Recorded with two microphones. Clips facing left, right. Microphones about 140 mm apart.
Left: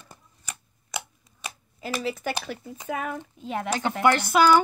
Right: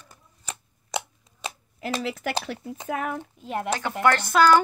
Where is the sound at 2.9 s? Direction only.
65° right (ahead or behind).